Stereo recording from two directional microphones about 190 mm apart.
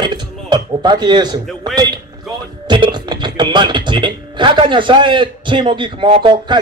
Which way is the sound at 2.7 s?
25° right (ahead or behind).